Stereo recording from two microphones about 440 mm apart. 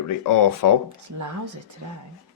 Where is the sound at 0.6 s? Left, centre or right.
Left.